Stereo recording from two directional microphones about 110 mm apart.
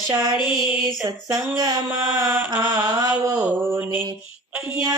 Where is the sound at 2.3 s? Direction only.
20° right (ahead or behind).